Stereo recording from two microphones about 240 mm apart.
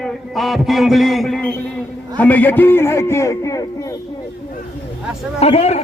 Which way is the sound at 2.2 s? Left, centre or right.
Centre.